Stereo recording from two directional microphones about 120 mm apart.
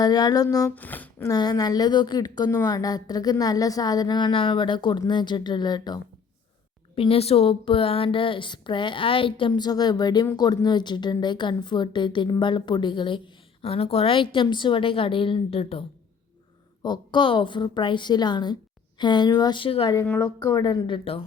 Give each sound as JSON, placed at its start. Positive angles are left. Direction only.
{"t": 0.0, "sound": "speech", "side_deg": 35}
{"t": 0.8, "sound": "speech", "side_deg": 15}
{"t": 1.3, "sound": "speech", "side_deg": 30}
{"t": 6.9, "sound": "speech", "side_deg": 50}
{"t": 9.5, "sound": "speech", "side_deg": 35}
{"t": 16.8, "sound": "speech", "side_deg": 40}
{"t": 20.2, "sound": "speech", "side_deg": 30}